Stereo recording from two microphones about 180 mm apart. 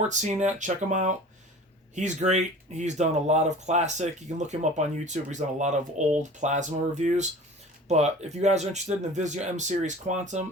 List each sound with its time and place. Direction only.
0.1 s speech: 40° right (ahead or behind)